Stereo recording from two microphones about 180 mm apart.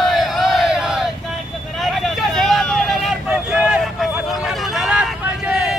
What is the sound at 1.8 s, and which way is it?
Vehicle, centre (ahead or behind).